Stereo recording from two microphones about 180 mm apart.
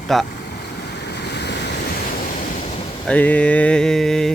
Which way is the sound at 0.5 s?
70° left (ahead or behind).